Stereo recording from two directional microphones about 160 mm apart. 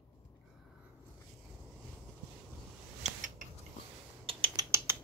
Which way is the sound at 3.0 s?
50° right (ahead or behind).